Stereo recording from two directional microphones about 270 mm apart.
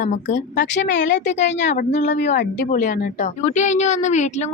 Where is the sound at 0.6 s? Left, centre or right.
Left.